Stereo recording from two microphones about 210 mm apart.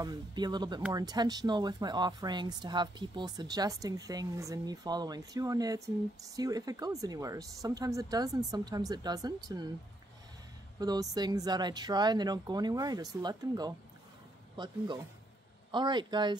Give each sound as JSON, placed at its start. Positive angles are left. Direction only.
{"t": 0.0, "sound": "speech", "side_deg": -20}
{"t": 10.8, "sound": "speech", "side_deg": -20}